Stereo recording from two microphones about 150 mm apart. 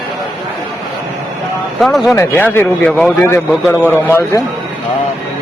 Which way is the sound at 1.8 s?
Centre (ahead or behind).